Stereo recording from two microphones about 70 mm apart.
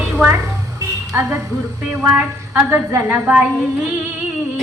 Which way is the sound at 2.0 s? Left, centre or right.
Right.